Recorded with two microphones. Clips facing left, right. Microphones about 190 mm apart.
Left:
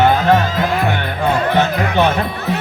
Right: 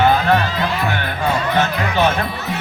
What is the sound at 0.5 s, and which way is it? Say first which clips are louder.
Music: left 3 dB; 50° left (ahead or behind).